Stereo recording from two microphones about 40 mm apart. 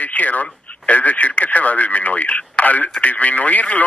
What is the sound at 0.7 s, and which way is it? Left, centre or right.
Speech, left.